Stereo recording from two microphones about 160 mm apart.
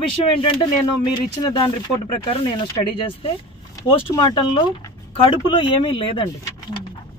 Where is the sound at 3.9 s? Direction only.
30° left (ahead or behind).